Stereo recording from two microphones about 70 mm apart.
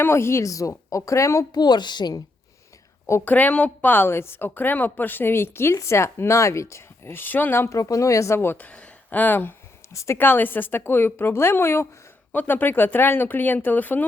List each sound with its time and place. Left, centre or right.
0.0 s speech: left
1.5 s a woman's voice: left
3.1 s a woman's voice: left
7.8 s speech: left
8.5 s speech: left
9.9 s speech: left
10.2 s a woman's voice: left
12.3 s a woman's voice: left